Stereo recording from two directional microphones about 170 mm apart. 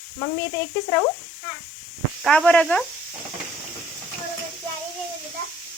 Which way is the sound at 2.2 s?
5° left (ahead or behind).